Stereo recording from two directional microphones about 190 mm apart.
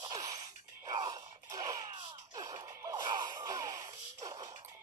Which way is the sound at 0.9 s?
25° right (ahead or behind).